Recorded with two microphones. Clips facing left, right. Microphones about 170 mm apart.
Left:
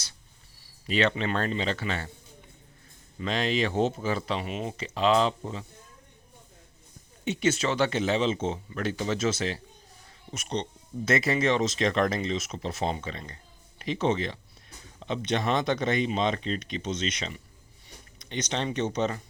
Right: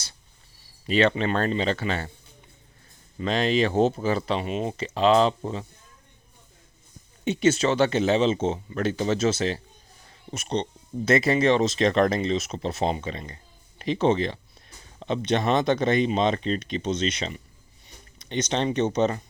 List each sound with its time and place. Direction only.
0.9 s speech: 35° right (ahead or behind)
3.2 s speech: 35° right (ahead or behind)
7.3 s speech: 30° right (ahead or behind)
13.7 s speech: 30° right (ahead or behind)